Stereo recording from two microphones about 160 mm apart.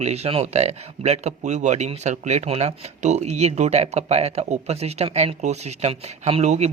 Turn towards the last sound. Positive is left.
turn(degrees=-45)  # may be behind; listen again after turning